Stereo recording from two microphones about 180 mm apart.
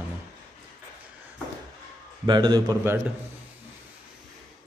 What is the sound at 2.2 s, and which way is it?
Speech, 25° right (ahead or behind).